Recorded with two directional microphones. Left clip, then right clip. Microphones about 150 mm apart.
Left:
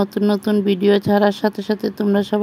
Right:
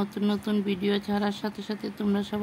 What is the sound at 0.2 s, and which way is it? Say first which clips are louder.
Speech: left 11 dB; 45° left (ahead or behind).